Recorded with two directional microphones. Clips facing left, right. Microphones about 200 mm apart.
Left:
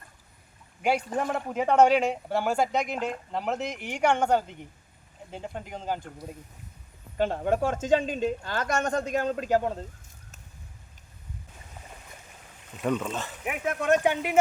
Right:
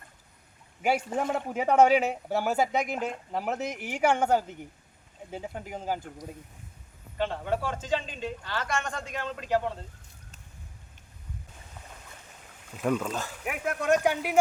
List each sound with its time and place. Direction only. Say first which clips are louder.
0.8 s a man's voice: left 1 dB; 5° right (ahead or behind)
7.2 s a woman's voice: left 4 dB; 45° left (ahead or behind)
12.7 s a man's voice: even; centre (ahead or behind)